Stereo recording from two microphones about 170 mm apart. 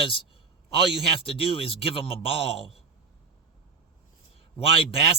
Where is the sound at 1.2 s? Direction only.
35° left (ahead or behind).